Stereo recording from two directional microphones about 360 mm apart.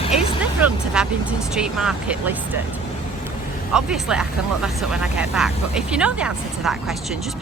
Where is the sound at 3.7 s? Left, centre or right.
Centre.